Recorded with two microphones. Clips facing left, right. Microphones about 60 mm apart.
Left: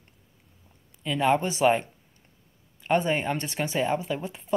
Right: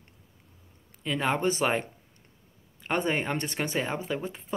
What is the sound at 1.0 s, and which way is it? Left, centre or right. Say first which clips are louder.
Speech: left 3 dB; right.